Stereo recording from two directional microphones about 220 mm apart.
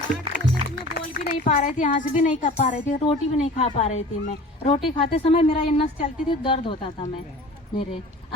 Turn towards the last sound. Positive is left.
turn(degrees=25)  # may be behind; listen again after turning